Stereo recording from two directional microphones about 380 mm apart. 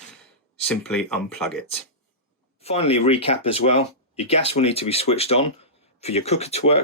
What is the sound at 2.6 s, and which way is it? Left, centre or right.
Speech, centre.